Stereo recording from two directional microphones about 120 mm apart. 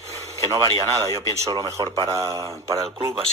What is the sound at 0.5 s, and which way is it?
Speech, 30° right (ahead or behind).